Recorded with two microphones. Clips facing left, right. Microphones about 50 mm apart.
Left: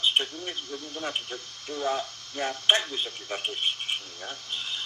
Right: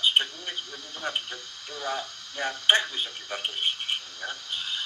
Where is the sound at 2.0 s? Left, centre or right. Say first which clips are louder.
Left 1 dB; right.